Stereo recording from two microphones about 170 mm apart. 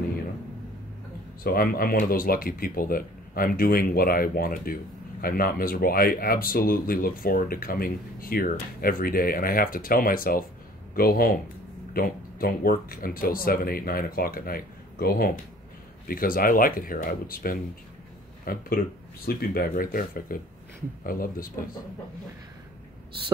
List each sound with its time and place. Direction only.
1.4 s speech: 60° left (ahead or behind)